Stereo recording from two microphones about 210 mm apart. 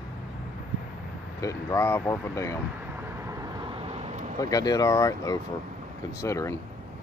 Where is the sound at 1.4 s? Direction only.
15° left (ahead or behind).